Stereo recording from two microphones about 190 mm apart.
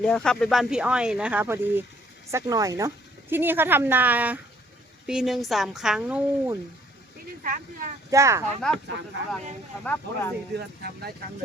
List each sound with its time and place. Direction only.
0.0 s speech: 5° left (ahead or behind)
7.4 s speech: 45° right (ahead or behind)
8.1 s speech: 15° right (ahead or behind)
8.7 s speech: 5° left (ahead or behind)
9.8 s speech: 10° left (ahead or behind)